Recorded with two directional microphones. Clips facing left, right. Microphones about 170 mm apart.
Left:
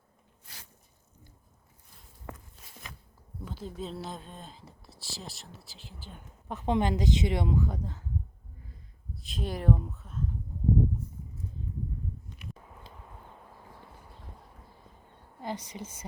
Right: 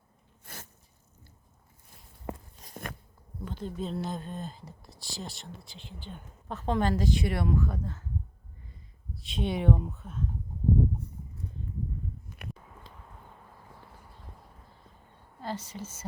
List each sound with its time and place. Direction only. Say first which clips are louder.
0.4 s a sound: right 7 dB; 50° right (ahead or behind)
2.3 s a sound: right 6 dB; 20° right (ahead or behind)
2.6 s biting: right 10 dB; 50° right (ahead or behind)
3.4 s speech: right 3 dB; 5° left (ahead or behind)
6.5 s speech: even; 15° left (ahead or behind)
9.1 s speech: right 4 dB; centre (ahead or behind)
15.4 s speech: even; 15° left (ahead or behind)